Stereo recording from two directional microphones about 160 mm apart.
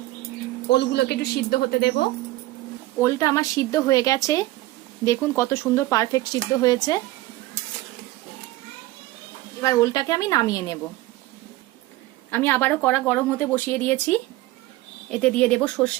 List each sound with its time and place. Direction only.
0.7 s speech: 90° left
3.0 s speech: 20° left (ahead or behind)
9.6 s speech: 20° left (ahead or behind)
12.3 s speech: 10° left (ahead or behind)
15.1 s speech: 5° left (ahead or behind)